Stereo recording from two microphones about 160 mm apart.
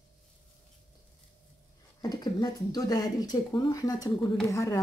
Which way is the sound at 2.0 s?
25° left (ahead or behind).